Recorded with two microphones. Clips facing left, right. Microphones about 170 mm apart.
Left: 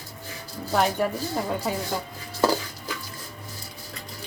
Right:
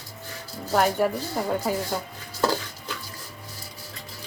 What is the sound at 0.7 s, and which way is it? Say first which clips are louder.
Speech: right 1 dB; centre (ahead or behind).